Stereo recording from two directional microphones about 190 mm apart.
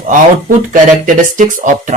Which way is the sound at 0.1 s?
45° right (ahead or behind).